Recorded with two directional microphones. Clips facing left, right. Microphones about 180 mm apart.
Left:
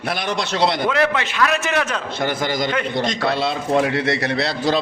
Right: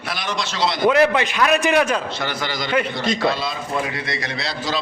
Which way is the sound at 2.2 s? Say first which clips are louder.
Left 4 dB; 50° left (ahead or behind).